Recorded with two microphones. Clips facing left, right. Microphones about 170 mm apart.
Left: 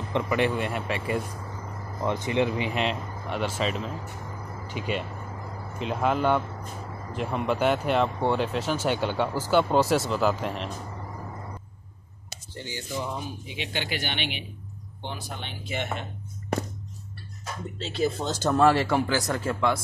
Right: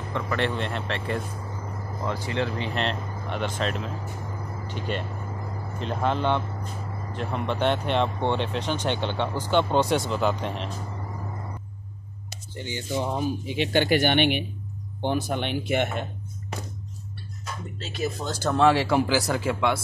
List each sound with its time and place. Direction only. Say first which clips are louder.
0.1 s speech: left 2 dB; 10° left (ahead or behind)
2.0 s speech: left 3 dB; 20° left (ahead or behind); by 10.7 s centre (ahead or behind)
12.5 s speech: right 4 dB; 20° right (ahead or behind)
13.1 s speech: right 8 dB; 45° right (ahead or behind)
15.4 s speech: right 8 dB; 65° right (ahead or behind)
17.7 s speech: left 4 dB; 30° left (ahead or behind)
18.5 s speech: right 1 dB; centre (ahead or behind)